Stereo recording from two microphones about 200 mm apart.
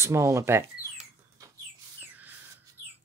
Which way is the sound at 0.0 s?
15° right (ahead or behind).